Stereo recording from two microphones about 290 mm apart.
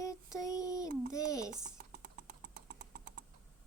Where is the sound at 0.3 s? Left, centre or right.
Centre.